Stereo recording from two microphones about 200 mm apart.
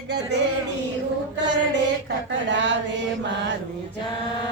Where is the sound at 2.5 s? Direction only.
65° right (ahead or behind).